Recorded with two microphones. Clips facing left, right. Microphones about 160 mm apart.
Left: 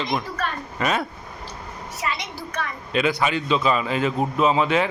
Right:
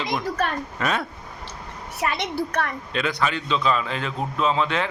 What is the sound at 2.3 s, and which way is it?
Speech, 60° right (ahead or behind).